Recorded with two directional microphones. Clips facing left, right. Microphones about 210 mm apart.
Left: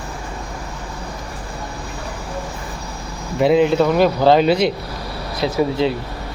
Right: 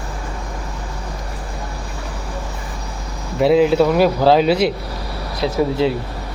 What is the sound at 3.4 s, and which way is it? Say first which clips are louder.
Speech: right 1 dB; centre (ahead or behind).